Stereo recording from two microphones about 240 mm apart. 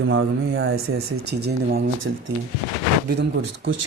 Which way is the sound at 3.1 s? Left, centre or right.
Right.